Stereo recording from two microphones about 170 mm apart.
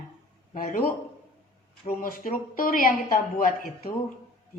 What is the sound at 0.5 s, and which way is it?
Speech, 55° left (ahead or behind).